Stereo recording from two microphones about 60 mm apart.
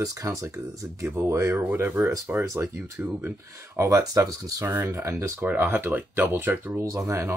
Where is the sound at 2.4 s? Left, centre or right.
Right.